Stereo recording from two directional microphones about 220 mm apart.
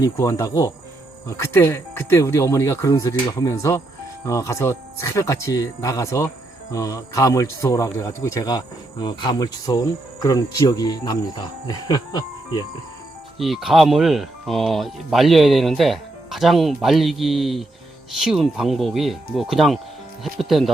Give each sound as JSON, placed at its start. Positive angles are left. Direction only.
{"t": 0.0, "sound": "speech", "side_deg": 15}
{"t": 13.4, "sound": "speech", "side_deg": 0}